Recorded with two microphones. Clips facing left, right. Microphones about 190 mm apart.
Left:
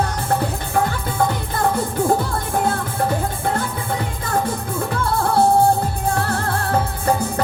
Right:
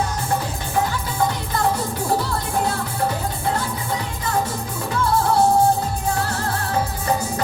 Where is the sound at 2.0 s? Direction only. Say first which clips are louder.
Left 1 dB; 50° left (ahead or behind).